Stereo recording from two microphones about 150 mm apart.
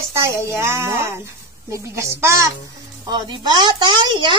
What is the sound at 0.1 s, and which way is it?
Speech, 20° right (ahead or behind).